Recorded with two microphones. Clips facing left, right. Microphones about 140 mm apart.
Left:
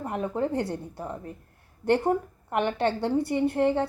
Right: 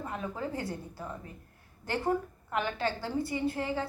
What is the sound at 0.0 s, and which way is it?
Speech, 55° left (ahead or behind).